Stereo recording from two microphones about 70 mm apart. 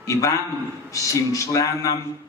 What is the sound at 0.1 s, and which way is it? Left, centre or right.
Speech, left.